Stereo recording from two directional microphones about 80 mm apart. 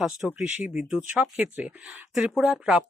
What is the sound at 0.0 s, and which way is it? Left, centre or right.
Speech, centre.